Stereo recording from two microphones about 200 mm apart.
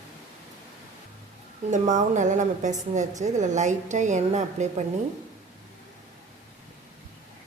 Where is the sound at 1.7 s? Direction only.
35° right (ahead or behind).